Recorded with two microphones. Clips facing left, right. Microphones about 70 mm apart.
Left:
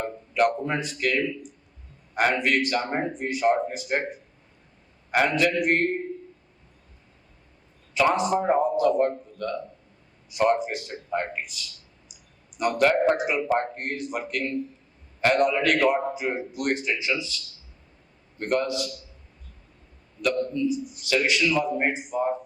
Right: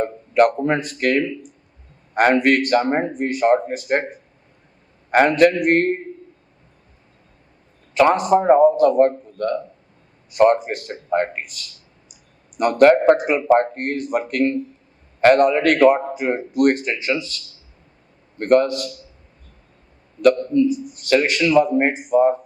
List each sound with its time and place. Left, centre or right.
0.0 s a man's voice: right
5.1 s a man's voice: right
7.9 s a man's voice: right
20.2 s a man's voice: right